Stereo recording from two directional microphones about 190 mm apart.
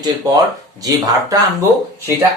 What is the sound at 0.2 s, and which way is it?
Speech, 20° right (ahead or behind).